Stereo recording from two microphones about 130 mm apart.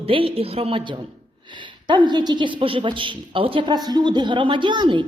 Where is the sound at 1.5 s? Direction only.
40° right (ahead or behind).